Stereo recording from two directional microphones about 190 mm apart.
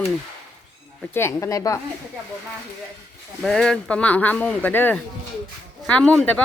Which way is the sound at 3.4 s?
5° left (ahead or behind).